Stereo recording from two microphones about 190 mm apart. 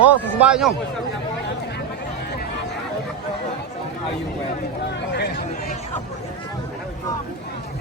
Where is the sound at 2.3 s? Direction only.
60° left (ahead or behind).